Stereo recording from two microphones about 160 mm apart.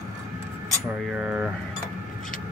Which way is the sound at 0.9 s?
5° right (ahead or behind).